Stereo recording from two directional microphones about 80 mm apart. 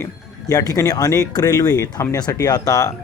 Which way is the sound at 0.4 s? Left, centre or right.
Left.